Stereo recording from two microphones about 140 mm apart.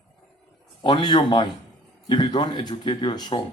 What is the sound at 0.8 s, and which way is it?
Speech, 30° left (ahead or behind).